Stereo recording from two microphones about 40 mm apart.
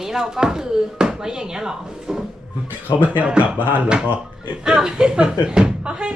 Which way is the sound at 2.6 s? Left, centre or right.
Right.